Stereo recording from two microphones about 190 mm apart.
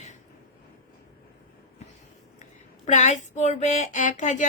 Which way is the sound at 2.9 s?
40° left (ahead or behind).